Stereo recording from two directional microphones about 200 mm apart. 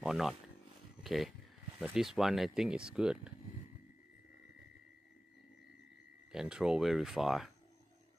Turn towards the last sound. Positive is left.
turn(degrees=0)  # may be behind; listen again after turning